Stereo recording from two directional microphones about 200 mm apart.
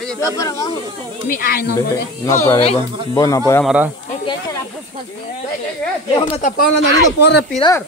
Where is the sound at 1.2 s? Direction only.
45° left (ahead or behind).